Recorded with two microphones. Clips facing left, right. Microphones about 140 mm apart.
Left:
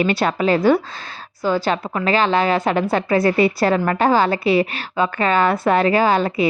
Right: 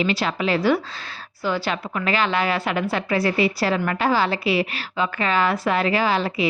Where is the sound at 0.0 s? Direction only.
50° left (ahead or behind).